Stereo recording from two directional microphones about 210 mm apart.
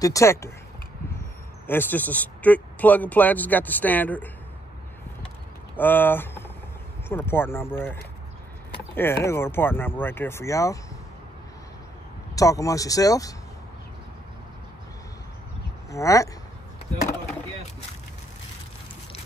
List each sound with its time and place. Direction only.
0.0 s speech: 15° left (ahead or behind)
1.7 s speech: 10° left (ahead or behind)
5.8 s speech: 10° left (ahead or behind)
12.4 s speech: 15° left (ahead or behind)
15.9 s speech: 15° left (ahead or behind)